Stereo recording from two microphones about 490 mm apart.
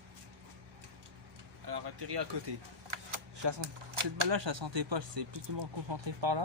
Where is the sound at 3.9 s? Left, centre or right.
Right.